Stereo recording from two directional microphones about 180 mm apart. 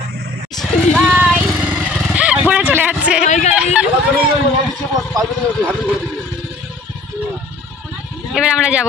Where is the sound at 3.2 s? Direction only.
40° left (ahead or behind).